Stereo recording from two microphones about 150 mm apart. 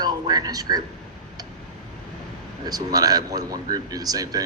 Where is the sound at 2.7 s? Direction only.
25° right (ahead or behind).